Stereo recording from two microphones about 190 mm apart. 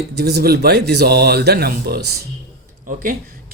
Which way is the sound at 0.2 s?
60° right (ahead or behind).